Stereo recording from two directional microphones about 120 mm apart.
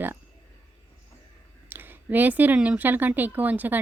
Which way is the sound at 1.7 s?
15° right (ahead or behind).